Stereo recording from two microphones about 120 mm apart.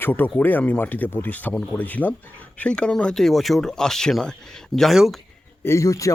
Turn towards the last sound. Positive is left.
turn(degrees=25)  # may be behind; listen again after turning